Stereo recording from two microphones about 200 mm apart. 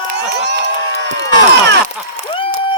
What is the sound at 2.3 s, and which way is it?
Applause, 25° left (ahead or behind).